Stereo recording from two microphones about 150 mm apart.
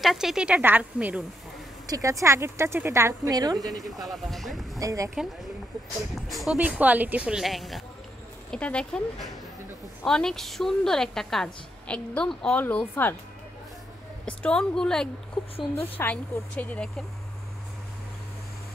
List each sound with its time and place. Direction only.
0.0 s speech: centre (ahead or behind)
1.9 s speech: 20° right (ahead or behind)
3.7 s a woman's voice: centre (ahead or behind)
4.7 s speech: 20° right (ahead or behind)
6.2 s a woman's voice: centre (ahead or behind)
14.2 s a woman's voice: 10° left (ahead or behind)